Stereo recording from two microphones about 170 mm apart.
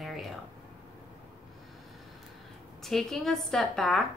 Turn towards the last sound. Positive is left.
turn(degrees=0)  # may be behind; listen again after turning